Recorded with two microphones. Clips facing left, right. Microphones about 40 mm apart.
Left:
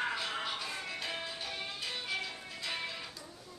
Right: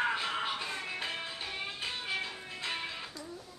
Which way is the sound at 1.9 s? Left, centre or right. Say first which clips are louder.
Right 1 dB; centre.